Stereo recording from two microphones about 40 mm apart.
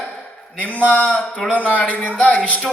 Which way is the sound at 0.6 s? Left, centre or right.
Left.